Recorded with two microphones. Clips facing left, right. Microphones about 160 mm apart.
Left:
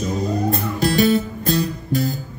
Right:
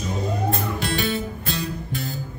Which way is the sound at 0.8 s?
40° left (ahead or behind).